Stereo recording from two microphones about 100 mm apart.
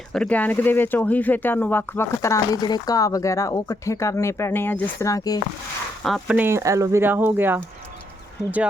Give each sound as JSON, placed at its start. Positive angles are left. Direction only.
{"t": 0.1, "sound": "speech", "side_deg": 10}
{"t": 2.2, "sound": "speech", "side_deg": 30}
{"t": 2.6, "sound": "speech", "side_deg": 45}
{"t": 5.0, "sound": "speech", "side_deg": 35}
{"t": 6.0, "sound": "speech", "side_deg": 0}
{"t": 6.2, "sound": "speech", "side_deg": -20}
{"t": 6.6, "sound": "speech", "side_deg": -30}